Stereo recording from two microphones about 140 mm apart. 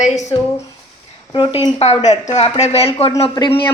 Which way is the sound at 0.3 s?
35° left (ahead or behind).